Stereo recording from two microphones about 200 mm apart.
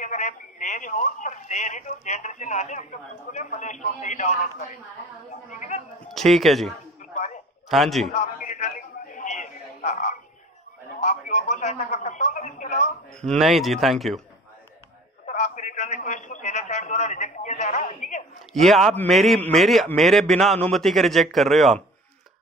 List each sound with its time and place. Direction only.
0.0 s speech: 35° left (ahead or behind)
6.0 s speech: centre (ahead or behind)
7.7 s a man's voice: centre (ahead or behind)
8.1 s a sound: 35° left (ahead or behind)
11.0 s speech: 35° left (ahead or behind)
13.2 s a man's voice: centre (ahead or behind)
15.2 s a man's voice: 40° left (ahead or behind)
18.5 s a man's voice: centre (ahead or behind)